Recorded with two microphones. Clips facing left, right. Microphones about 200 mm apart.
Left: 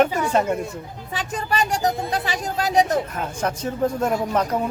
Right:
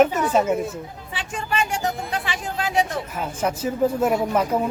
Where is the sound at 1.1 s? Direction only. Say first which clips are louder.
Left 2 dB; 40° left (ahead or behind).